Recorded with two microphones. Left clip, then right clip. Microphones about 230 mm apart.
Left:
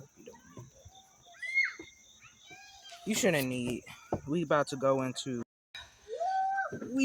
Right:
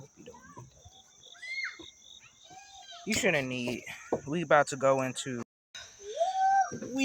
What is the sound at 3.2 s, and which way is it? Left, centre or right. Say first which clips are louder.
Speech: right 1 dB; left.